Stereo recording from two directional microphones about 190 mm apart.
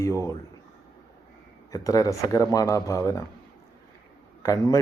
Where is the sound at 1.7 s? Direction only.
15° left (ahead or behind).